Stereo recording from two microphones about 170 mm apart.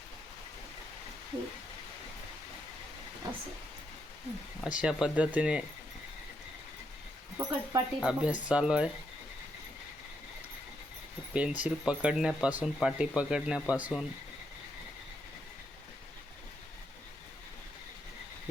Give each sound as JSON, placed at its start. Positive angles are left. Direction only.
{"t": 4.6, "sound": "speech", "side_deg": -5}
{"t": 7.3, "sound": "speech", "side_deg": -20}
{"t": 8.0, "sound": "speech", "side_deg": -5}
{"t": 11.3, "sound": "speech", "side_deg": -5}